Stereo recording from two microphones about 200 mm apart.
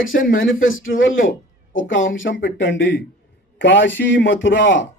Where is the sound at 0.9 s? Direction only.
75° left (ahead or behind).